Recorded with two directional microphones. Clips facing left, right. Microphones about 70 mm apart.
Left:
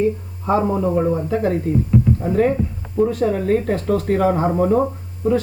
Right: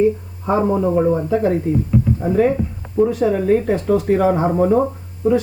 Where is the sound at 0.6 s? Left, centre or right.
Centre.